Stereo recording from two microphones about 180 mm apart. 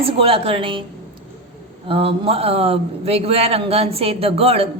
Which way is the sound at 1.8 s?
30° right (ahead or behind).